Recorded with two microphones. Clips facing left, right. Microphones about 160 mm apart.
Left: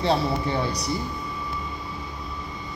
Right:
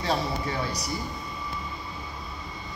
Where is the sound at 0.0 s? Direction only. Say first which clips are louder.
Left 5 dB; 30° left (ahead or behind).